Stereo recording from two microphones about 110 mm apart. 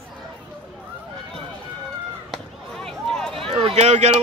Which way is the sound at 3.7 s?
90° right.